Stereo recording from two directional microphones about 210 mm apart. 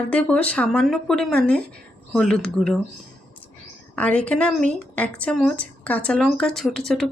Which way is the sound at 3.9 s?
5° left (ahead or behind).